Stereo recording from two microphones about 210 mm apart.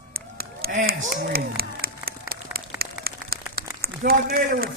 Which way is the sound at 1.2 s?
45° right (ahead or behind).